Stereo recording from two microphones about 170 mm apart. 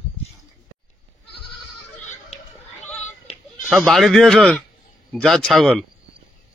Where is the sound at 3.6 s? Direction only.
Centre (ahead or behind).